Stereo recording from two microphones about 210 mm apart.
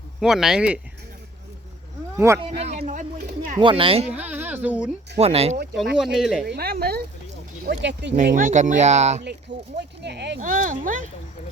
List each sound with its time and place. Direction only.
0.2 s speech: centre (ahead or behind)
2.1 s speech: 15° right (ahead or behind)
2.6 s a sound: 30° right (ahead or behind)
3.6 s speech: 25° right (ahead or behind)
4.1 s a sound: 5° right (ahead or behind)
5.1 s speech: 30° right (ahead or behind)
6.0 s speech: centre (ahead or behind)
6.4 s speech: 50° right (ahead or behind)
8.4 s speech: 35° right (ahead or behind)
9.7 s speech: 55° right (ahead or behind)
10.4 s speech: 40° right (ahead or behind)